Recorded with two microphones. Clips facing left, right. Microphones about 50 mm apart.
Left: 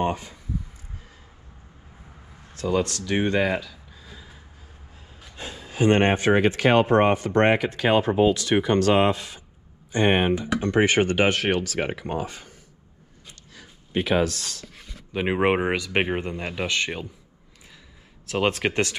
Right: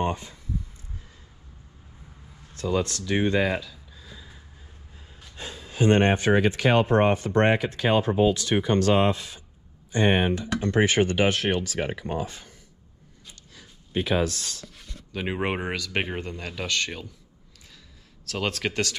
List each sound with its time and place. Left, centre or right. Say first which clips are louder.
2.6 s speech: left 2 dB; left
3.1 s speech: even; left
5.4 s speech: left 2 dB; left
13.6 s speech: left 2 dB; left
15.1 s speech: left 6 dB; left
18.2 s speech: left 5 dB; left